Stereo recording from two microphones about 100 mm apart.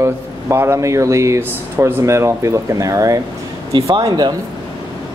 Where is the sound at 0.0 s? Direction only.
25° right (ahead or behind).